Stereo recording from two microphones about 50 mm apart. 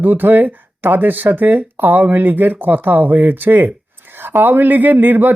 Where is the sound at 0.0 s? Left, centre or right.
Right.